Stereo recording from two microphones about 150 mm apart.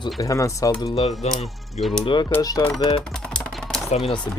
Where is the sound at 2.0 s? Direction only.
30° left (ahead or behind).